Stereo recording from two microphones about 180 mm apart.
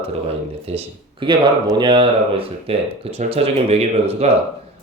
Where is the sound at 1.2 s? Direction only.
25° right (ahead or behind).